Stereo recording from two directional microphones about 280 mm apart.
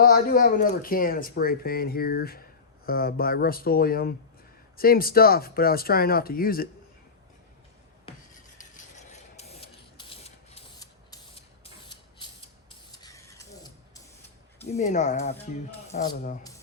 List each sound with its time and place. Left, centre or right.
0.0 s speech: left
8.5 s rub: left
12.2 s spray: centre
14.6 s speech: left